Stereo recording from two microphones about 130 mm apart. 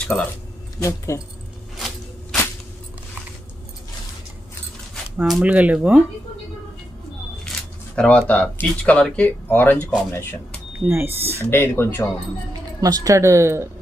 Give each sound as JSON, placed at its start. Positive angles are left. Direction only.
{"t": 0.1, "sound": "speech", "side_deg": 5}
{"t": 0.8, "sound": "speech", "side_deg": 25}
{"t": 5.1, "sound": "speech", "side_deg": -5}
{"t": 7.9, "sound": "speech", "side_deg": 10}
{"t": 10.8, "sound": "speech", "side_deg": -20}
{"t": 11.5, "sound": "speech", "side_deg": 15}
{"t": 12.8, "sound": "speech", "side_deg": -30}